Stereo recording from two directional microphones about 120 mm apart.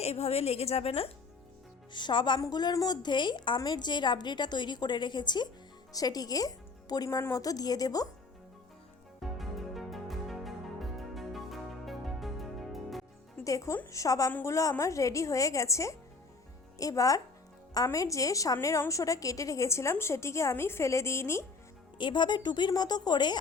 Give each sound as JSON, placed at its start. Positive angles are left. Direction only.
{"t": 0.0, "sound": "a woman's voice", "side_deg": 60}
{"t": 1.9, "sound": "a woman's voice", "side_deg": 40}
{"t": 9.2, "sound": "music", "side_deg": 0}
{"t": 13.4, "sound": "a woman's voice", "side_deg": 25}
{"t": 21.9, "sound": "a woman's voice", "side_deg": 40}